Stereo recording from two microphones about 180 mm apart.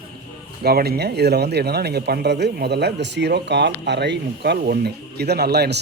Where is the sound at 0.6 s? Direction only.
60° right (ahead or behind).